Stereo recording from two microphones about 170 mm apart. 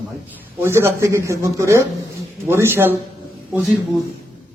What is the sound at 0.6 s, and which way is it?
Speech, 15° right (ahead or behind).